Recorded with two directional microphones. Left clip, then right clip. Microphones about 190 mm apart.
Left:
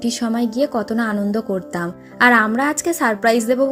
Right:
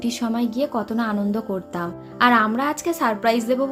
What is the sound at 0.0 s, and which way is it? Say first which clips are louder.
A woman's voice: left 3 dB; 25° left (ahead or behind).